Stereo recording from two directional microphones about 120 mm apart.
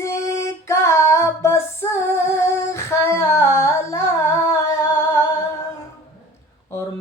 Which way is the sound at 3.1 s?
20° left (ahead or behind).